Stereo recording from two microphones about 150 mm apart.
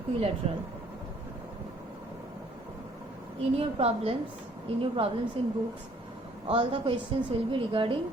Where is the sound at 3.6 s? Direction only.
40° right (ahead or behind).